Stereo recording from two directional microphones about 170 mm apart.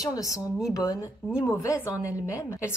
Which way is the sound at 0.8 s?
20° left (ahead or behind).